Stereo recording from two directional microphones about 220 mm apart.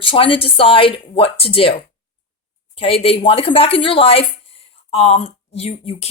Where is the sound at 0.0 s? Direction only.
25° left (ahead or behind).